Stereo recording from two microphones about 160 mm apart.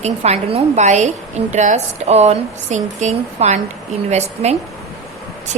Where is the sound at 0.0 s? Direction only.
40° right (ahead or behind).